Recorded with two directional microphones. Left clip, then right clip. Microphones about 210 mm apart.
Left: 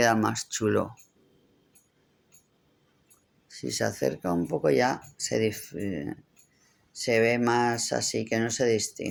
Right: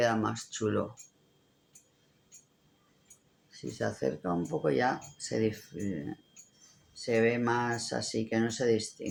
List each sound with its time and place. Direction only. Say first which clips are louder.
0.0 s speech: left 5 dB; 50° left (ahead or behind)
3.5 s speech: left 5 dB; 50° left (ahead or behind)
7.0 s speech: left 4 dB; 40° left (ahead or behind)